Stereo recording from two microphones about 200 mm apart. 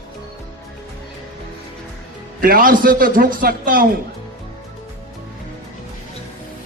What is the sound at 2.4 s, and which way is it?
A man's voice, 45° right (ahead or behind).